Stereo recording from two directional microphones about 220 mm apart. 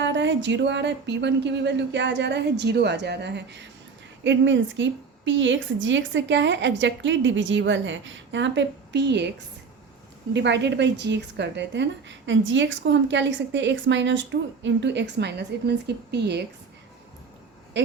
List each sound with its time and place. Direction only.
0.0 s a woman's voice: 55° right (ahead or behind)
10.3 s a woman's voice: 50° right (ahead or behind)
17.7 s a sound: 50° right (ahead or behind)